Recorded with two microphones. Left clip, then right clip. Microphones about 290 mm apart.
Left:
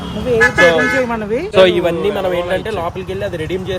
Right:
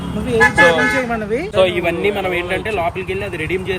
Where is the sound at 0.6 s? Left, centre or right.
Centre.